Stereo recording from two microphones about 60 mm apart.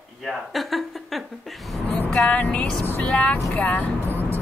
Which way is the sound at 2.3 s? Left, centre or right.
Left.